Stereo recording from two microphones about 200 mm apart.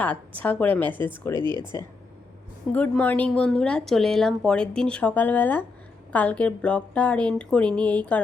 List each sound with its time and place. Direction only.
0.0 s a woman's voice: 10° left (ahead or behind)
1.4 s speech: 20° right (ahead or behind)
2.7 s a woman's voice: 5° left (ahead or behind)